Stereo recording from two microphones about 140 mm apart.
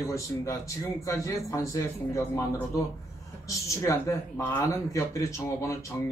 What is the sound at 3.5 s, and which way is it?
A man's voice, 20° left (ahead or behind).